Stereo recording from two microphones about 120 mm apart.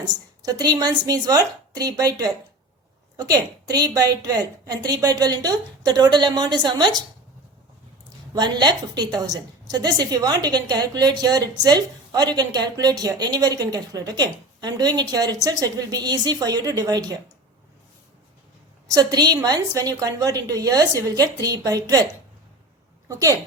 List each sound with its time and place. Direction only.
0.0 s a woman's voice: 35° right (ahead or behind)
8.3 s a woman's voice: 35° right (ahead or behind)
18.9 s a woman's voice: 35° right (ahead or behind)